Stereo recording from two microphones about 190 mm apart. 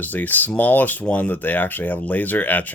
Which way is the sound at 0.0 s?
10° left (ahead or behind).